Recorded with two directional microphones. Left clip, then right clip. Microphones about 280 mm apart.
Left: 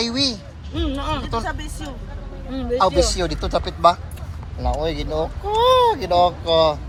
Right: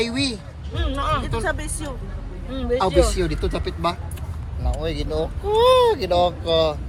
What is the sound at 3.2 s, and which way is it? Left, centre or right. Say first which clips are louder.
Speech: left 3 dB; centre.